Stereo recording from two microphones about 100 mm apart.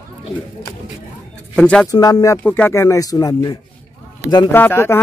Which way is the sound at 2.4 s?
20° left (ahead or behind).